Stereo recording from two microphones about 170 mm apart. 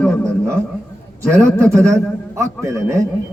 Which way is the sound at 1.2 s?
15° right (ahead or behind).